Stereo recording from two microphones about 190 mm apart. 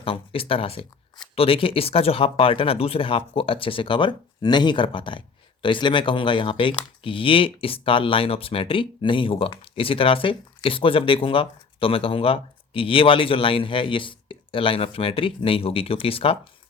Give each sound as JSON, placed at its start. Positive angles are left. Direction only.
{"t": 0.0, "sound": "speech", "side_deg": 30}